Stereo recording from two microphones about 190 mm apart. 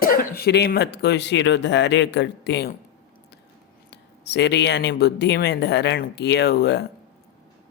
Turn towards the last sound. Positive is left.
turn(degrees=60)  # may be behind; listen again after turning